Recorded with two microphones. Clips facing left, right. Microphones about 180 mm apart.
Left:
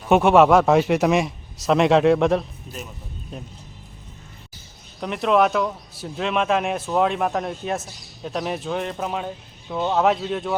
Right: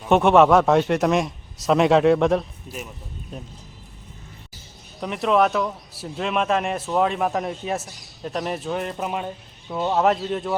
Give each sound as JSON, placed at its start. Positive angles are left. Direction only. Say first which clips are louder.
{"t": 0.1, "sound": "a man's voice", "louder": "left 1 dB", "side_deg": 0}
{"t": 4.9, "sound": "a man's voice", "louder": "left 1 dB", "side_deg": 0}